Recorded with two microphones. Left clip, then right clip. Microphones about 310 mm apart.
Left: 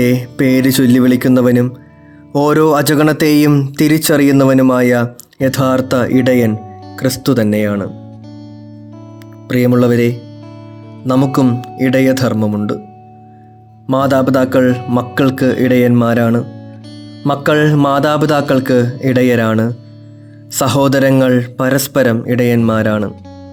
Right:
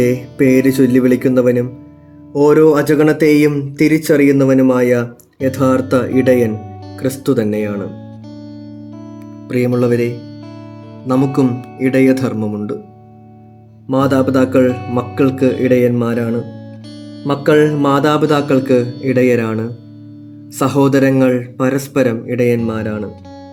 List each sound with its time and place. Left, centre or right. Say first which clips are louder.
0.0 s speech: even; left
9.5 s speech: left 3 dB; left
13.8 s speech: left 2 dB; left
16.5 s guitar: even; centre
17.3 s speech: right 1 dB; left